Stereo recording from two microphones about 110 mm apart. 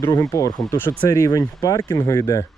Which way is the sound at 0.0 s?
30° left (ahead or behind).